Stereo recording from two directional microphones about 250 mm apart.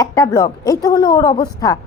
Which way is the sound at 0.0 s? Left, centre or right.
Centre.